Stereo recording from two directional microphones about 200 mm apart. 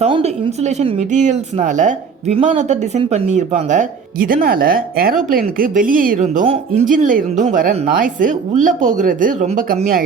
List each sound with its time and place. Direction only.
0.0 s a woman's voice: 30° right (ahead or behind)